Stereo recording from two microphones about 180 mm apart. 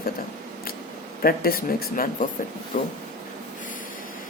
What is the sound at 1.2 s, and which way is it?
Speech, 55° left (ahead or behind).